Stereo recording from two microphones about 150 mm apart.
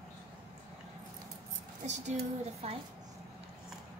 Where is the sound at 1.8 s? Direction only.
50° right (ahead or behind).